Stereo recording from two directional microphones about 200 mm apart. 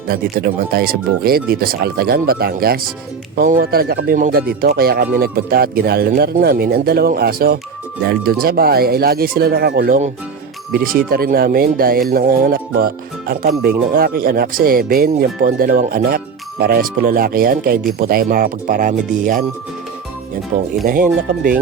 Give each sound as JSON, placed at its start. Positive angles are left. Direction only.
{"t": 0.1, "sound": "speech", "side_deg": -50}
{"t": 20.8, "sound": "speech", "side_deg": -45}